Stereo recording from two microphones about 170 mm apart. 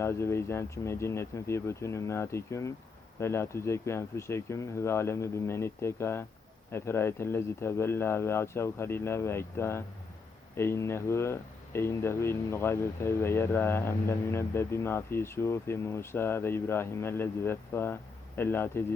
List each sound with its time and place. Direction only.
0.0 s speech: 15° left (ahead or behind)